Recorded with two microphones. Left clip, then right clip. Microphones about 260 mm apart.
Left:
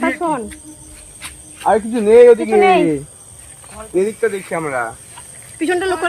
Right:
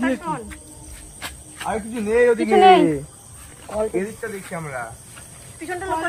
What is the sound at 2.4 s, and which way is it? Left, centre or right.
Speech, centre.